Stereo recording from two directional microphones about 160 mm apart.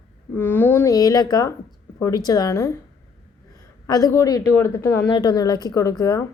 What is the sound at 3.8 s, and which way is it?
A woman's voice, 20° left (ahead or behind).